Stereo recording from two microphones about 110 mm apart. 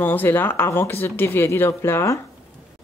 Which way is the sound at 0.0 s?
15° left (ahead or behind).